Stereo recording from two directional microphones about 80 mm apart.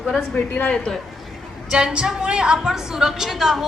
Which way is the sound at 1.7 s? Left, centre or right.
Centre.